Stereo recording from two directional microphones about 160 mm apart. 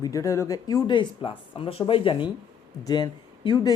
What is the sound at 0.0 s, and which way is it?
Speech, 20° left (ahead or behind).